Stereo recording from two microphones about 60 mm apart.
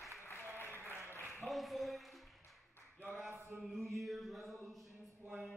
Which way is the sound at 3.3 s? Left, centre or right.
Right.